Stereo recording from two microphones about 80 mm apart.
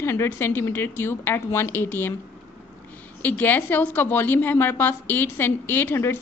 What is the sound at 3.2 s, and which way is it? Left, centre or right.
A woman's voice, left.